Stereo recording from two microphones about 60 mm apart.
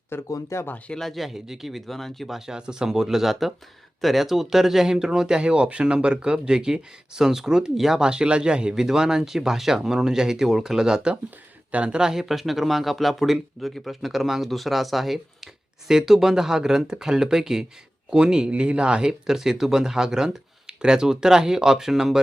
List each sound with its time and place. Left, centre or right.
0.1 s speech: left
0.5 s speech: left
0.9 s speech: centre
2.5 s speech: centre